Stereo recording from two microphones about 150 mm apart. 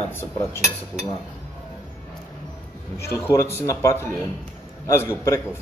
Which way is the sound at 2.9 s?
15° left (ahead or behind).